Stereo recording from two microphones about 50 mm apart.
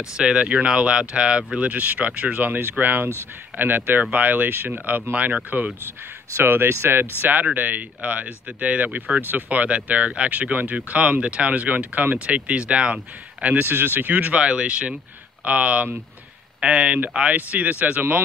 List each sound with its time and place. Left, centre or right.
0.2 s speech: right
6.4 s speech: right
13.7 s speech: right